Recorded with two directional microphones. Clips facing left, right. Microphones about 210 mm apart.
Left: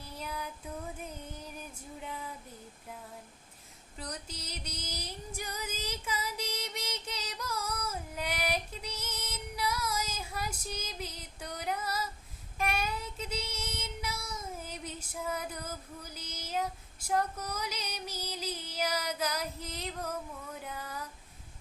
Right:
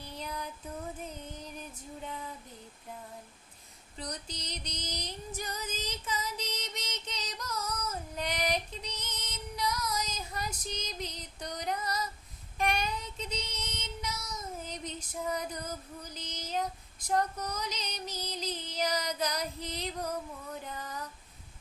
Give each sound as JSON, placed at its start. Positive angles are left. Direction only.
{"t": 0.0, "sound": "a sound", "side_deg": 5}
{"t": 1.0, "sound": "music", "side_deg": 10}
{"t": 2.0, "sound": "female singing", "side_deg": 5}
{"t": 3.9, "sound": "female singing", "side_deg": 5}
{"t": 12.5, "sound": "child singing", "side_deg": 5}
{"t": 20.6, "sound": "female singing", "side_deg": 10}